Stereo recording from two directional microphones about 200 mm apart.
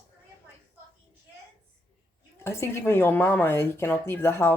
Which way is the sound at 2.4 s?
15° left (ahead or behind).